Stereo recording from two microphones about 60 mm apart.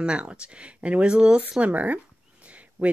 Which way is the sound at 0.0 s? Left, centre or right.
Centre.